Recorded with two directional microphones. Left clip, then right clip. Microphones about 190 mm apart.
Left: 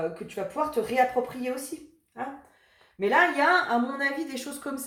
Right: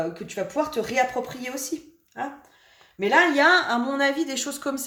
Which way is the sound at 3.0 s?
45° right (ahead or behind).